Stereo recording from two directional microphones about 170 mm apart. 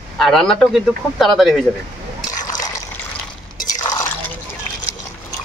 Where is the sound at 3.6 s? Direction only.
25° left (ahead or behind).